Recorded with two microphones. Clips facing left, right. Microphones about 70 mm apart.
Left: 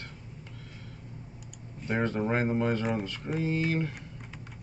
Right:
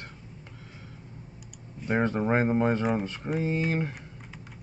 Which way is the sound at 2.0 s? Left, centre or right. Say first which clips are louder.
Right 3 dB; right.